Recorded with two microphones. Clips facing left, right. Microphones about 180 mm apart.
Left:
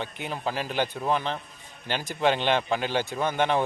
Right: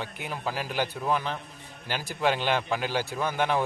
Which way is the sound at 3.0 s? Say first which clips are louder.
Left 2 dB; 20° left (ahead or behind).